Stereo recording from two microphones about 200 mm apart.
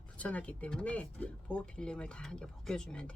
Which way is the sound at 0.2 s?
5° left (ahead or behind).